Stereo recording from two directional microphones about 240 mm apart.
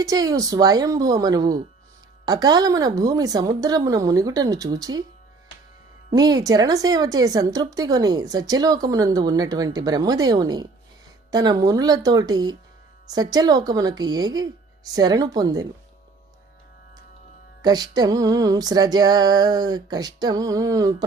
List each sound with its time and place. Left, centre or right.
0.0 s speech: centre
6.1 s speech: centre
17.6 s speech: centre